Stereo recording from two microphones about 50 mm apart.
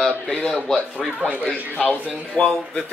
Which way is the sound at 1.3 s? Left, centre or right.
Centre.